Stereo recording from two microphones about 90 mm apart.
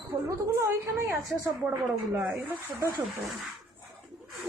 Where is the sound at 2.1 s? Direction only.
15° right (ahead or behind).